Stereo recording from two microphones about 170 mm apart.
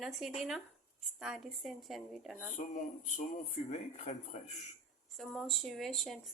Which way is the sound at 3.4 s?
40° left (ahead or behind).